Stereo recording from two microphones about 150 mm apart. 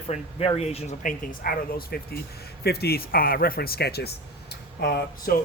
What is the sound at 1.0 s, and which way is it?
Speech, 65° left (ahead or behind).